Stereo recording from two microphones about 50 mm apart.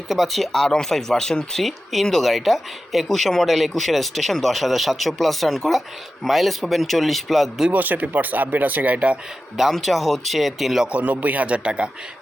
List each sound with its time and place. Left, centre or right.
0.1 s speech: centre
7.7 s speech: right
9.7 s speech: centre
10.8 s speech: right